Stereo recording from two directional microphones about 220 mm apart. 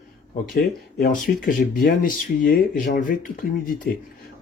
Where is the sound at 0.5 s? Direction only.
45° left (ahead or behind).